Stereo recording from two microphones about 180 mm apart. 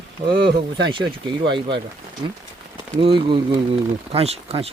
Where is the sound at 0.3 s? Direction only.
75° right (ahead or behind).